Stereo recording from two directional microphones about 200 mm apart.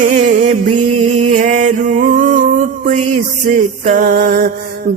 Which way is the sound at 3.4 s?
40° right (ahead or behind).